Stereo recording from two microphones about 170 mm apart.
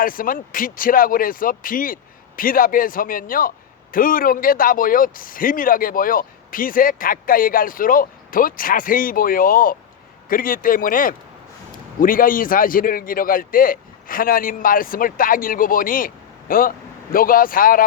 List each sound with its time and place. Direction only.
0.0 s a man's voice: 55° left (ahead or behind)